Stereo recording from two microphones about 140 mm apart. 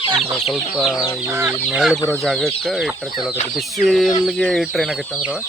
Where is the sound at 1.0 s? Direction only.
25° left (ahead or behind).